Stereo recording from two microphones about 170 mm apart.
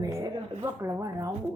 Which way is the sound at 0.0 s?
20° right (ahead or behind).